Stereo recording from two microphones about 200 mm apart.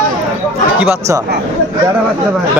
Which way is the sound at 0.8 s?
15° right (ahead or behind).